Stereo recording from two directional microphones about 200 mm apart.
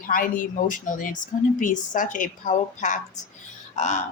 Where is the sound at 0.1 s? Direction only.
40° left (ahead or behind).